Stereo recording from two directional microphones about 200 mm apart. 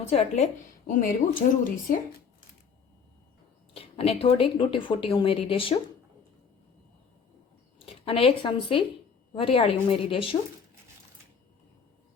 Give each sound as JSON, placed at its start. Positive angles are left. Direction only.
{"t": 0.0, "sound": "a woman's voice", "side_deg": 30}
{"t": 3.8, "sound": "speech", "side_deg": 30}
{"t": 7.9, "sound": "speech", "side_deg": 30}